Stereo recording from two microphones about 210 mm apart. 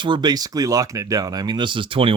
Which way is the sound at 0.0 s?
20° right (ahead or behind).